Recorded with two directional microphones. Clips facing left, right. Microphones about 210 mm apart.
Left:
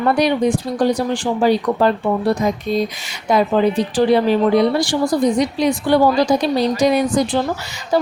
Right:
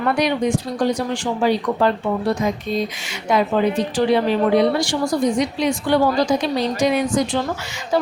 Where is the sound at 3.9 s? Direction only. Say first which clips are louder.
Left 4 dB; 35° left (ahead or behind).